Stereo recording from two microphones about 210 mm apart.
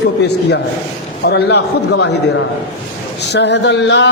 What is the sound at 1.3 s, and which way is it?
Speech, 55° left (ahead or behind).